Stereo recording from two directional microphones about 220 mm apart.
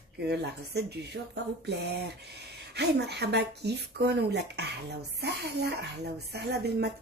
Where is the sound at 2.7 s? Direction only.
50° right (ahead or behind).